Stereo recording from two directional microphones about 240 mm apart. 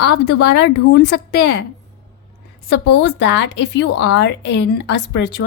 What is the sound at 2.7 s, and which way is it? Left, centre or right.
A woman's voice, left.